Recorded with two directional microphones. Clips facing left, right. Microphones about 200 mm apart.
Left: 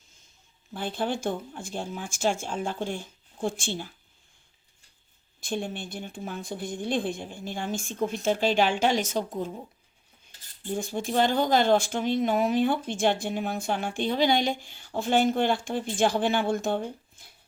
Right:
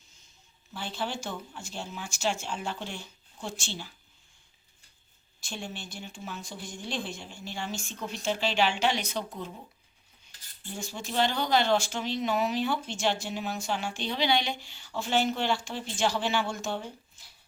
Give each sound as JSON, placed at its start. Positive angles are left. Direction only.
{"t": 0.7, "sound": "speech", "side_deg": 50}
{"t": 5.4, "sound": "speech", "side_deg": 55}
{"t": 10.8, "sound": "speech", "side_deg": 55}